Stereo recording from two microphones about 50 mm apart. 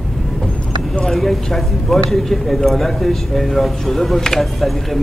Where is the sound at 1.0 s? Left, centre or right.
Centre.